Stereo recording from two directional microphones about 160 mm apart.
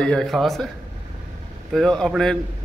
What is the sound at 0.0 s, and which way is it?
Speech, 5° left (ahead or behind).